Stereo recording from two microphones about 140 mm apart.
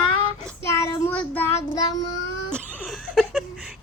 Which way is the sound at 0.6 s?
20° left (ahead or behind).